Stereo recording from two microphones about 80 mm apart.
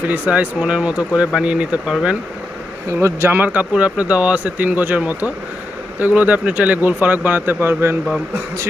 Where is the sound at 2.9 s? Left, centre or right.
Right.